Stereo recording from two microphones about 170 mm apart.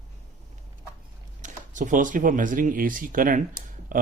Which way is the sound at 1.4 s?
50° right (ahead or behind).